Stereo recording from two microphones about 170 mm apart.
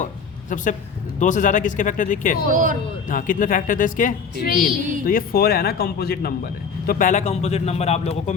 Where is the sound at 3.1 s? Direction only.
50° left (ahead or behind).